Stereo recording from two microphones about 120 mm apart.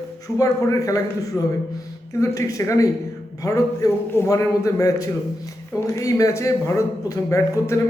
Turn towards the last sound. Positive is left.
turn(degrees=25)  # may be behind; listen again after turning